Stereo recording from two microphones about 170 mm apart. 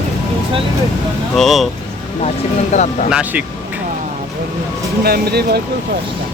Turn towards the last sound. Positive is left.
turn(degrees=-70)  # may be behind; listen again after turning